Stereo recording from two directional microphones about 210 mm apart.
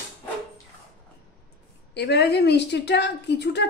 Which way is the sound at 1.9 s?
50° left (ahead or behind).